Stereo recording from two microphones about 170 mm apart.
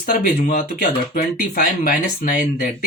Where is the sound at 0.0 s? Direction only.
55° left (ahead or behind).